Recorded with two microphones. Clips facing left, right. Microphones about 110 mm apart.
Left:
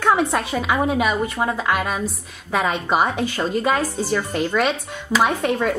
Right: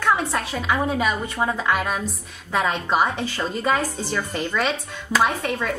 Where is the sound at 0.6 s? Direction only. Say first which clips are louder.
Left 2 dB; 5° left (ahead or behind).